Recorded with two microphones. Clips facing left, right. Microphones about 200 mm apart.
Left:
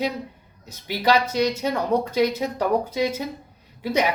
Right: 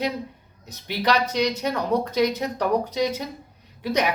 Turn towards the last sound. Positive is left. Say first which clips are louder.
# left 1 dB
turn(degrees=10)  # may be behind; listen again after turning